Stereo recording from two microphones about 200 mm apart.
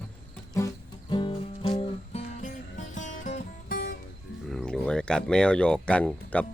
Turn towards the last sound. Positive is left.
turn(degrees=5)  # may be behind; listen again after turning